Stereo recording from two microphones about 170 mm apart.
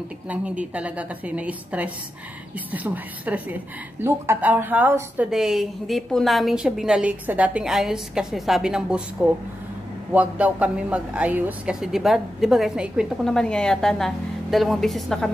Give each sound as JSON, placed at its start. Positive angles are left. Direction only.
{"t": 0.3, "sound": "a woman's voice", "side_deg": -10}